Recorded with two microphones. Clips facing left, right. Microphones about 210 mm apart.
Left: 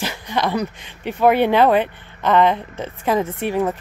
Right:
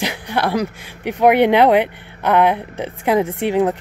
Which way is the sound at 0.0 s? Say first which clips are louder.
Right 2 dB; 15° right (ahead or behind).